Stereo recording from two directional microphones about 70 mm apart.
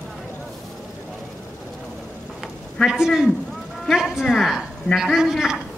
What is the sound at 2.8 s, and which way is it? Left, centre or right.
A man's voice, centre.